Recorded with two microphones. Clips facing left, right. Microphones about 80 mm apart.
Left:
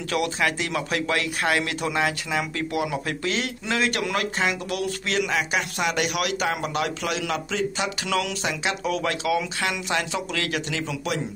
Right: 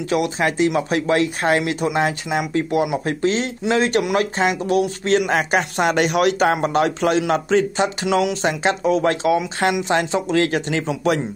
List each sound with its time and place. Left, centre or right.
0.1 s speech: right